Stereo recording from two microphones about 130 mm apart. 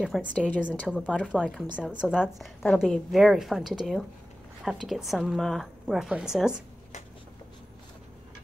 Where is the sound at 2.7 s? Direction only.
10° left (ahead or behind).